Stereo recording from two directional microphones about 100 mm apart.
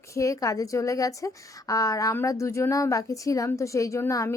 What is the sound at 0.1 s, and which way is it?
Speech, 30° left (ahead or behind).